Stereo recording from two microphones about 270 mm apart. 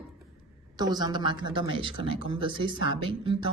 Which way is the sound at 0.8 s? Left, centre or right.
Centre.